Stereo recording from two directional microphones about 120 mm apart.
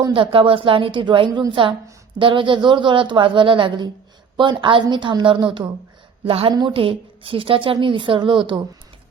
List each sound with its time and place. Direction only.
0.1 s a woman's voice: 45° right (ahead or behind)
6.2 s a woman's voice: 50° right (ahead or behind)
6.5 s a woman's voice: 35° right (ahead or behind)
6.7 s a woman's voice: 50° right (ahead or behind)